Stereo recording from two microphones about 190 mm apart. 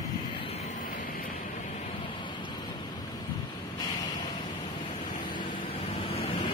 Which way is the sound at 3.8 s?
20° left (ahead or behind).